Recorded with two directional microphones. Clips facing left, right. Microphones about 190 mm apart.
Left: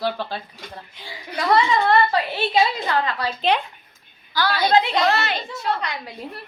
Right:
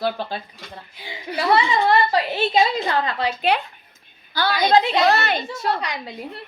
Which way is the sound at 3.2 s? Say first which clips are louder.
Right 3 dB; 20° right (ahead or behind).